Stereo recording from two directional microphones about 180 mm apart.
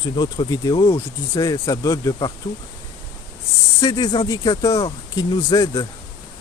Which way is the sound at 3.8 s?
20° left (ahead or behind).